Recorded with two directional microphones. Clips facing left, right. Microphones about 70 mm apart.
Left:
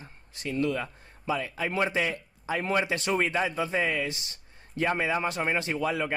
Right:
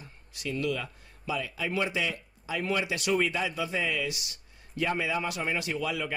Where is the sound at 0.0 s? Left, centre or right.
Left.